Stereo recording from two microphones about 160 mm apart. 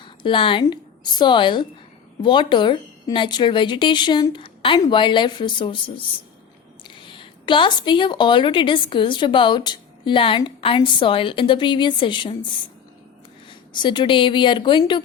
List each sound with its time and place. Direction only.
0.0 s speech: 30° left (ahead or behind)
6.8 s speech: 30° left (ahead or behind)
13.7 s speech: 30° left (ahead or behind)